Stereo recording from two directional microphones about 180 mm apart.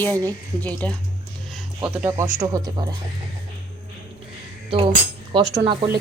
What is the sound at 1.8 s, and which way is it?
Speech, 10° right (ahead or behind).